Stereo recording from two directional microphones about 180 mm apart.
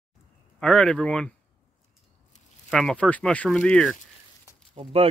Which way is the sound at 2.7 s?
5° left (ahead or behind).